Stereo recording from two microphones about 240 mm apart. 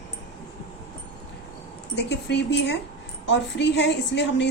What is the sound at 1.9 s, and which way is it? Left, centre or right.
A woman's voice, left.